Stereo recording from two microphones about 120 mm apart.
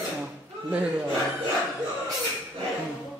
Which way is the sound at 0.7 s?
15° right (ahead or behind).